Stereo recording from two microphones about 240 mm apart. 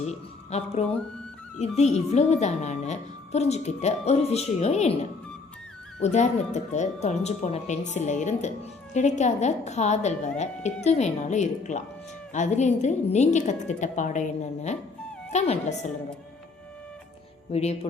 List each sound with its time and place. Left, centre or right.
0.0 s speech: left
6.0 s a woman's voice: left
17.5 s speech: left